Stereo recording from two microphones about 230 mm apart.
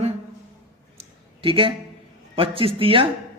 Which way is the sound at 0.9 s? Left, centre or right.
Right.